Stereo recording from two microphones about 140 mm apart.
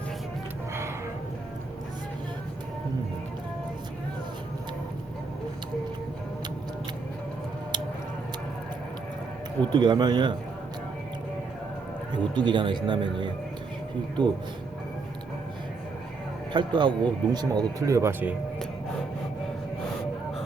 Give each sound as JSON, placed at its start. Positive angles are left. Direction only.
{"t": 9.6, "sound": "speech", "side_deg": -35}
{"t": 12.1, "sound": "speech", "side_deg": -35}
{"t": 16.5, "sound": "a man's voice", "side_deg": -35}